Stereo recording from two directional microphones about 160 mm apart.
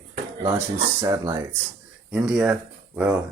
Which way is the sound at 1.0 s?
20° right (ahead or behind).